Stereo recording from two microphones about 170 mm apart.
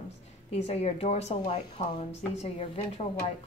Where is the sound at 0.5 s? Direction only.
40° left (ahead or behind).